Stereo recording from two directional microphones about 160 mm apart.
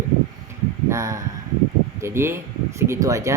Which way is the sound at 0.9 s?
20° right (ahead or behind).